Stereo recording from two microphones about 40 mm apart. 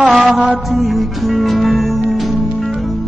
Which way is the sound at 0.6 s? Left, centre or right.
Centre.